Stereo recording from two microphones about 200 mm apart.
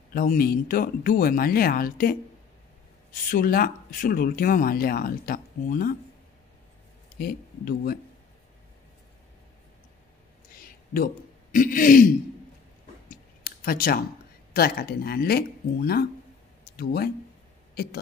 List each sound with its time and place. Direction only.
0.1 s speech: 45° left (ahead or behind)
3.3 s speech: 45° left (ahead or behind)
7.2 s speech: 45° left (ahead or behind)
10.5 s a sound: 45° left (ahead or behind)
11.5 s speech: 40° left (ahead or behind)
13.1 s a sound: 50° left (ahead or behind)
14.5 s speech: 50° left (ahead or behind)